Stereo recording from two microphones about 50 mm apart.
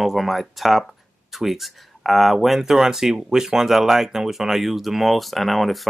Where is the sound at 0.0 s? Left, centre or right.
Centre.